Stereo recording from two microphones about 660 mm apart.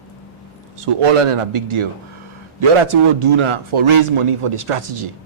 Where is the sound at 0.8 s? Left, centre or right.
Right.